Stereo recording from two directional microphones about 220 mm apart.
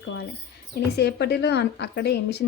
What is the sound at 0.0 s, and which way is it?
A woman's voice, 55° left (ahead or behind).